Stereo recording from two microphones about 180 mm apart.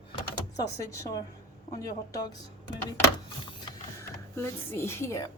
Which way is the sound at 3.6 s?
20° left (ahead or behind).